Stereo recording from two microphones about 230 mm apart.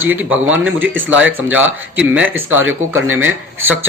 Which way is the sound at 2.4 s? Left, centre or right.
Right.